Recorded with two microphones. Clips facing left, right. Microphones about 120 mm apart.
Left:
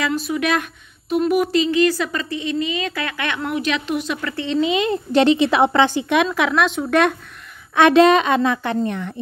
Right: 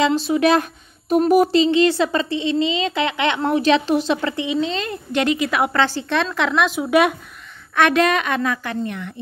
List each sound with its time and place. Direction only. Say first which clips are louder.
0.0 s speech: right 5 dB; 30° right (ahead or behind)
4.6 s a woman's voice: left 6 dB; 10° left (ahead or behind)
4.9 s a woman's voice: left 5 dB; 30° left (ahead or behind); by 7.2 s 10° right (ahead or behind)
7.7 s a woman's voice: left 5 dB; 20° left (ahead or behind)